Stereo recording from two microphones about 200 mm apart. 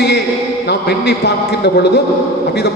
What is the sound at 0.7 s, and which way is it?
A man's voice, 55° left (ahead or behind).